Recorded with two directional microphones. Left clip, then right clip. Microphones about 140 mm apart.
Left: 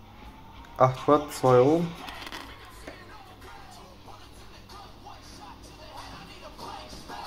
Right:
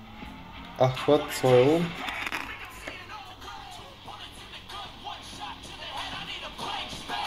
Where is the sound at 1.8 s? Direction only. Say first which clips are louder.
Right 4 dB; 15° right (ahead or behind).